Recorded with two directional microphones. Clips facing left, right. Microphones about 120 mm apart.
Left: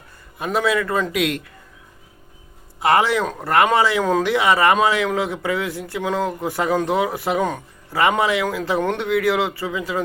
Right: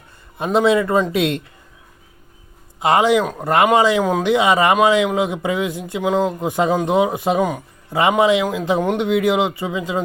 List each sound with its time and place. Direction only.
0.3 s speech: 25° right (ahead or behind)
2.8 s speech: 20° right (ahead or behind)